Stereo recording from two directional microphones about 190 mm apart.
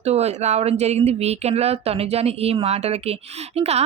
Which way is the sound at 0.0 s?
35° right (ahead or behind).